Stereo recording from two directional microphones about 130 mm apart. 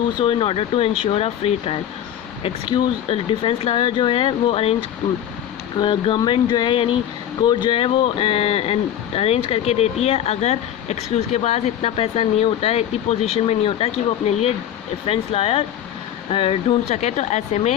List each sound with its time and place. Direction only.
0.2 s speech: 40° left (ahead or behind)
2.6 s speech: 40° left (ahead or behind)
5.8 s speech: 40° left (ahead or behind); by 17.7 s 55° left (ahead or behind)